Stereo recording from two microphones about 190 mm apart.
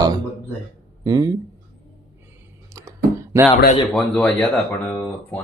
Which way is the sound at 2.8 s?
15° right (ahead or behind).